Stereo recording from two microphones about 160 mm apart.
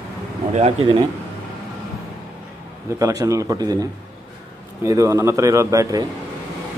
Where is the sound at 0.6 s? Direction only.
35° right (ahead or behind).